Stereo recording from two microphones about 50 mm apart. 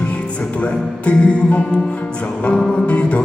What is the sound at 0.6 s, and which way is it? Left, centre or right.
Music, left.